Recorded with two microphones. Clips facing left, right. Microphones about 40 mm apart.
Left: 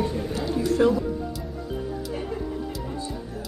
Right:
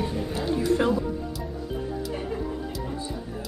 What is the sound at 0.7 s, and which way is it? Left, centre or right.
Speech, centre.